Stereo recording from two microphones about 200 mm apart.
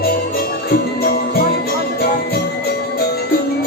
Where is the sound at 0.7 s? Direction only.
50° left (ahead or behind).